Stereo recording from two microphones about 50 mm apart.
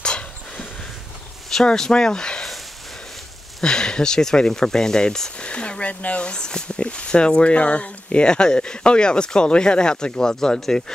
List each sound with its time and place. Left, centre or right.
0.0 s a sound: centre
1.5 s speech: centre
3.6 s speech: centre